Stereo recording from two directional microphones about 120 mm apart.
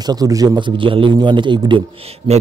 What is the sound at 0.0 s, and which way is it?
Speech, 30° right (ahead or behind).